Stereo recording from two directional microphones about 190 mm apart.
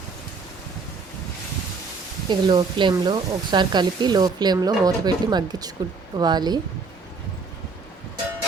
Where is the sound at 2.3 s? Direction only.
25° right (ahead or behind).